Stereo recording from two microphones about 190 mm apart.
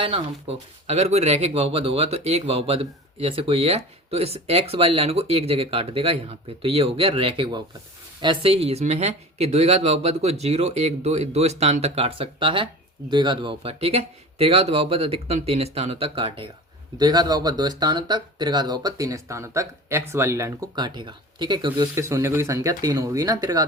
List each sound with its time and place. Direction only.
0.0 s speech: 30° right (ahead or behind)